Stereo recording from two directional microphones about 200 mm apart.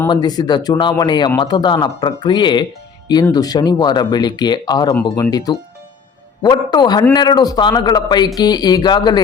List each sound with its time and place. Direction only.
0.1 s speech: 20° left (ahead or behind)